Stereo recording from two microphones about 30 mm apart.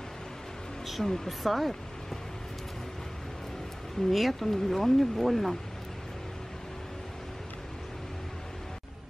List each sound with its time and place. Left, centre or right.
1.0 s speech: centre
1.4 s speech: centre
4.1 s speech: centre